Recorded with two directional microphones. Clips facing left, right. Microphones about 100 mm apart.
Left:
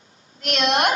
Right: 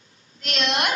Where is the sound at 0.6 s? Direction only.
40° left (ahead or behind).